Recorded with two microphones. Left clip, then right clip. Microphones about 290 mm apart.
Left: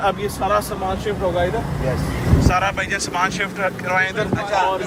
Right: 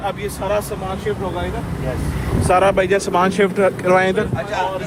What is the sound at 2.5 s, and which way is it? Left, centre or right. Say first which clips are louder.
Speech: right 8 dB; centre.